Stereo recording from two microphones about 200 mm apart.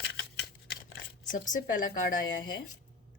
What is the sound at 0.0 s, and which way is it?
Scissors, 55° left (ahead or behind).